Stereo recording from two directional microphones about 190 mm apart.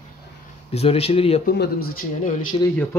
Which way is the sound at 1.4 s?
55° left (ahead or behind).